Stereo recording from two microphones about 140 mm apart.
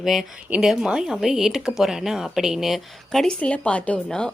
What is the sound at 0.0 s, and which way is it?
Speech, centre (ahead or behind).